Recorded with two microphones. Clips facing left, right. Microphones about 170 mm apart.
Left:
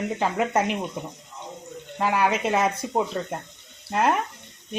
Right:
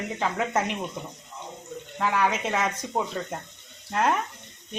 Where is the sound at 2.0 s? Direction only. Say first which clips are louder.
Left 3 dB; 10° left (ahead or behind).